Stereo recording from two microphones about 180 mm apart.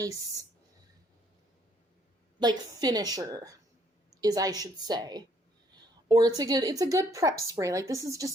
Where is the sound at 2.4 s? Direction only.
20° right (ahead or behind).